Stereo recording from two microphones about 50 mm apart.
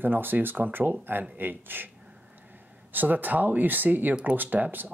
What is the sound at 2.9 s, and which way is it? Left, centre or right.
Speech, right.